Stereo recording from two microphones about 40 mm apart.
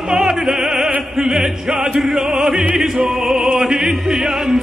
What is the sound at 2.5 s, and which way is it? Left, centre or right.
Music, right.